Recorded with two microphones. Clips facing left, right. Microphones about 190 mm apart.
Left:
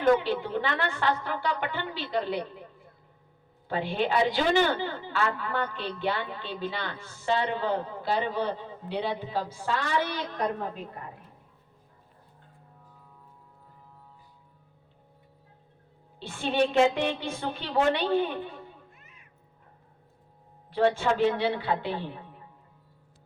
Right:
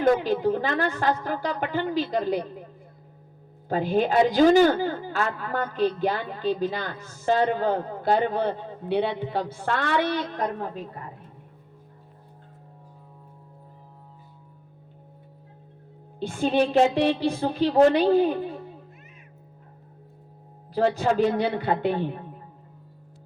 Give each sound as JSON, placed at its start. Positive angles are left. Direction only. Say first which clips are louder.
{"t": 0.2, "sound": "a woman's voice", "louder": "right 5 dB", "side_deg": -40}
{"t": 3.7, "sound": "a woman's voice", "louder": "right 5 dB", "side_deg": -45}
{"t": 16.2, "sound": "a woman's voice", "louder": "right 4 dB", "side_deg": -40}
{"t": 20.7, "sound": "a woman's voice", "louder": "right 2 dB", "side_deg": -40}